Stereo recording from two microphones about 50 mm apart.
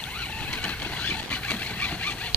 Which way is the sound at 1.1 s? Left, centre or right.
Left.